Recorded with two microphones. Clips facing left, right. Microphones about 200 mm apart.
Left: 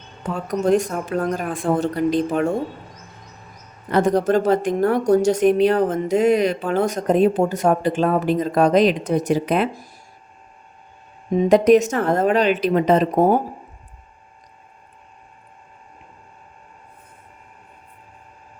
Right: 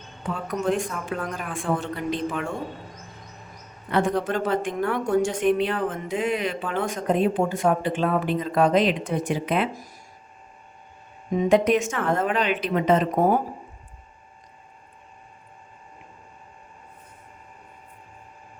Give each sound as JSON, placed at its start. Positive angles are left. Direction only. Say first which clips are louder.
{"t": 0.4, "sound": "a woman's voice", "louder": "left 7 dB", "side_deg": 40}
{"t": 3.8, "sound": "a woman's voice", "louder": "left 6 dB", "side_deg": 40}
{"t": 11.3, "sound": "a woman's voice", "louder": "left 6 dB", "side_deg": 35}